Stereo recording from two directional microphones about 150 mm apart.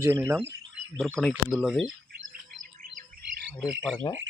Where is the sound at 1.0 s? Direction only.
5° left (ahead or behind).